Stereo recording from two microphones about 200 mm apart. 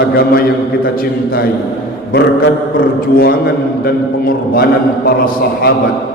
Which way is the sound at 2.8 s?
45° left (ahead or behind).